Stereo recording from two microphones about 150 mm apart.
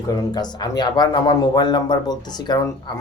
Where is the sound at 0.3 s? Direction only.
25° left (ahead or behind).